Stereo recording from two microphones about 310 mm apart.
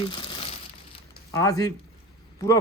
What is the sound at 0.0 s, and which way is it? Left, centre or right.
Crumpling, centre.